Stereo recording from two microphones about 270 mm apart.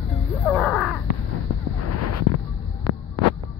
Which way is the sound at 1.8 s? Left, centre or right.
Left.